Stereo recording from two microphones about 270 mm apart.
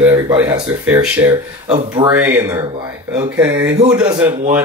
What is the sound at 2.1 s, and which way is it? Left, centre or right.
Speech, centre.